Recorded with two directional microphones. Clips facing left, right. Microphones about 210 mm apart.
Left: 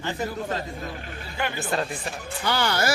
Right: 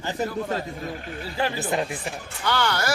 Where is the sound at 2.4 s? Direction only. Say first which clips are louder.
Right 1 dB; 10° left (ahead or behind).